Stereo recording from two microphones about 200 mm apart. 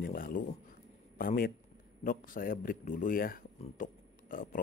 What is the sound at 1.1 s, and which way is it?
A man's voice, 45° left (ahead or behind).